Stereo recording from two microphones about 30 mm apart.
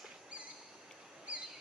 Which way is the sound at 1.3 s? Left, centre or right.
Right.